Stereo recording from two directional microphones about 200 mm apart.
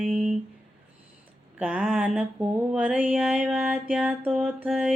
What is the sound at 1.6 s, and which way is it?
Mantra, 5° right (ahead or behind).